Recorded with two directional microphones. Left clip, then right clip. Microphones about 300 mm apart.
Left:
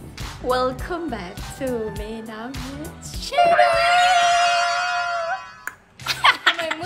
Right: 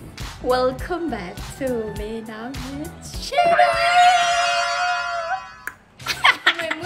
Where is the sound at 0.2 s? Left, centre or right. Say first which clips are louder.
Right 2 dB; centre.